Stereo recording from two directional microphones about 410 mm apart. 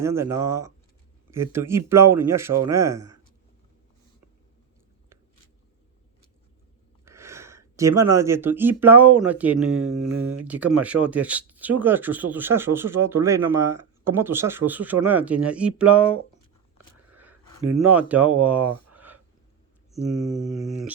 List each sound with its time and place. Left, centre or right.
0.0 s speech: centre
7.0 s speech: centre
10.0 s speech: right
10.4 s speech: centre
16.7 s a sound: centre
18.1 s speech: centre
18.9 s a sound: centre
19.9 s speech: centre